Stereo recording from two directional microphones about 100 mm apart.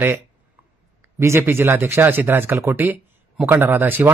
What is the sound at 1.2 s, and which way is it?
Speech, 25° right (ahead or behind).